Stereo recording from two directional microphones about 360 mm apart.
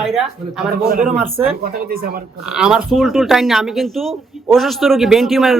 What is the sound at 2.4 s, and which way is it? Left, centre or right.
Speech, centre.